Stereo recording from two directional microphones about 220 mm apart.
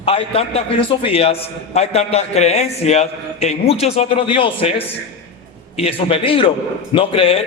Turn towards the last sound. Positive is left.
turn(degrees=25)  # may be behind; listen again after turning